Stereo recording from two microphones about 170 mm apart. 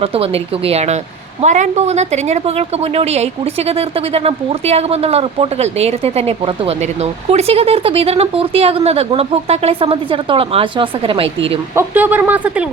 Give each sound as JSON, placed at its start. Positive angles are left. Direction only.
{"t": 0.0, "sound": "a woman's voice", "side_deg": -35}
{"t": 11.7, "sound": "speech", "side_deg": -15}